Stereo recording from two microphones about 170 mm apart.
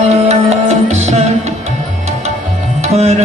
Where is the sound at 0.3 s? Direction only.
40° right (ahead or behind).